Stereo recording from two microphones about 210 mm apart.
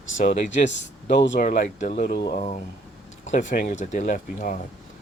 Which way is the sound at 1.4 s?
35° left (ahead or behind).